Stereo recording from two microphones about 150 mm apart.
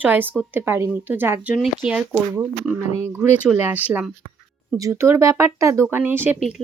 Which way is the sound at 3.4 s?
15° right (ahead or behind).